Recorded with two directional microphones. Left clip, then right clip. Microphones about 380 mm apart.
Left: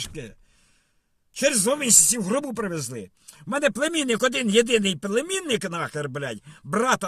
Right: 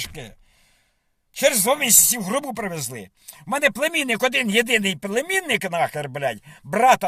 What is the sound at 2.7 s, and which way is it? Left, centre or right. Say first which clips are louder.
A man's voice: right 1 dB; centre.